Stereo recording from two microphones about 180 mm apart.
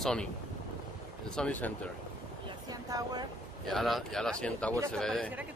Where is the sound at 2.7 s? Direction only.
20° right (ahead or behind).